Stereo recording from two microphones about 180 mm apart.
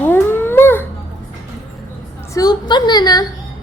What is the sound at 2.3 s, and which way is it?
Speech, 20° left (ahead or behind).